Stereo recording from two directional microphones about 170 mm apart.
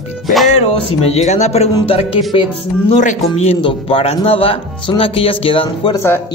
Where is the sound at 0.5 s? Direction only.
40° left (ahead or behind).